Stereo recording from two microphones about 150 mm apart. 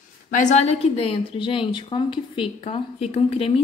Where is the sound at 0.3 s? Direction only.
55° left (ahead or behind).